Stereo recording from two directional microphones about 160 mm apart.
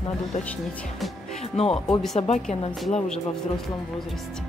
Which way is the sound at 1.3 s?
40° left (ahead or behind).